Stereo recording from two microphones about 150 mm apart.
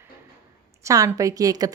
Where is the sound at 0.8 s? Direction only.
20° right (ahead or behind).